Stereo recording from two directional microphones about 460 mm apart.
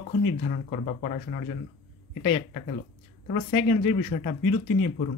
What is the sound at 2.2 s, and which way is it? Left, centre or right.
Speech, centre.